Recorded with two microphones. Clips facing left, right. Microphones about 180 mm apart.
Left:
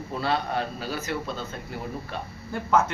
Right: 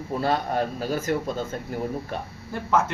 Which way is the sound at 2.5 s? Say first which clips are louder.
Even; centre (ahead or behind).